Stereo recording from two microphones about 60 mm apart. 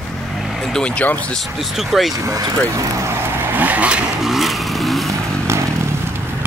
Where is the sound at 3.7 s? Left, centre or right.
Right.